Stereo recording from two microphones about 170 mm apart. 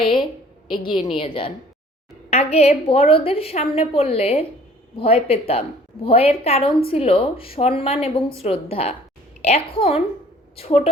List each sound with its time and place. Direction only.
0.9 s a woman's voice: 30° left (ahead or behind)